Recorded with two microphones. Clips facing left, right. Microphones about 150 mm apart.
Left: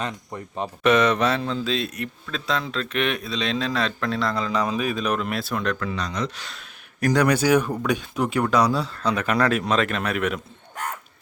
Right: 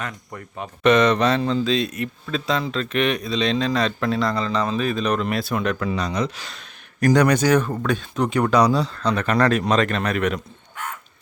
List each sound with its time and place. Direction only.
0.0 s speech: 25° left (ahead or behind)
0.8 s speech: 5° left (ahead or behind)
5.8 s speech: 15° right (ahead or behind); by 10.4 s 5° left (ahead or behind)